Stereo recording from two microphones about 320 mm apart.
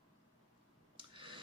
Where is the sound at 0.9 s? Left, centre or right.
Centre.